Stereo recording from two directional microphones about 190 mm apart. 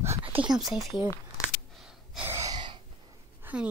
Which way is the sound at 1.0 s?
15° left (ahead or behind).